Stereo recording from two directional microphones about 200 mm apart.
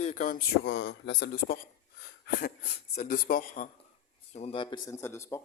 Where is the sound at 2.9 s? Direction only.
45° left (ahead or behind).